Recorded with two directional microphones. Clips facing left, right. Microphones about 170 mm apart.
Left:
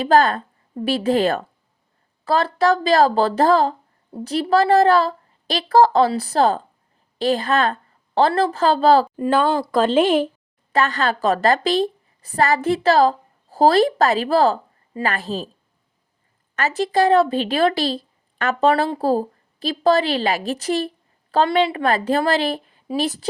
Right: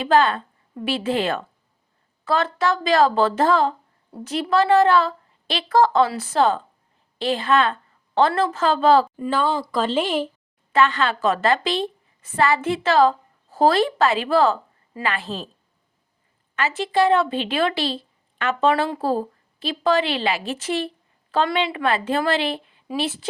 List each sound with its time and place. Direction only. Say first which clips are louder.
0.0 s speech: left 2 dB; 40° left (ahead or behind)
9.2 s speech: left 4 dB; 50° left (ahead or behind)
10.7 s a woman's voice: even; 40° left (ahead or behind)
16.6 s speech: left 2 dB; 40° left (ahead or behind)